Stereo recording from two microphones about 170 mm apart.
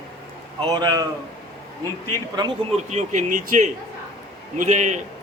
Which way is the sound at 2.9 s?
45° right (ahead or behind).